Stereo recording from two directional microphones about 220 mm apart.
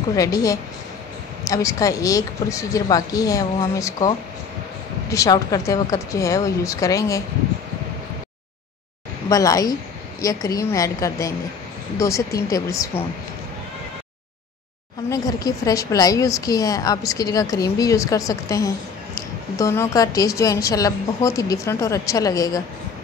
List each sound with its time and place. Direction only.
0.1 s a woman's voice: 15° left (ahead or behind)
5.1 s a woman's voice: 15° left (ahead or behind)
9.3 s a woman's voice: 15° left (ahead or behind)
15.4 s a woman's voice: 15° left (ahead or behind)